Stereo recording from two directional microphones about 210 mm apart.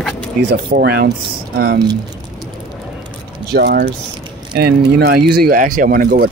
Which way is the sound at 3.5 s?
50° right (ahead or behind).